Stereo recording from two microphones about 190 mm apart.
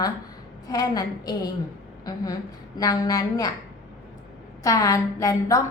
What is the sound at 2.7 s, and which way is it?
Speech, 20° left (ahead or behind).